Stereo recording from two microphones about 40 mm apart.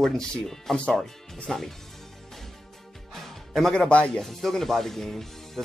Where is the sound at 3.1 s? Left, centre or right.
Centre.